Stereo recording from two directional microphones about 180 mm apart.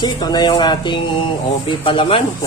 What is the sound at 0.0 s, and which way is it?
Speech, 25° left (ahead or behind).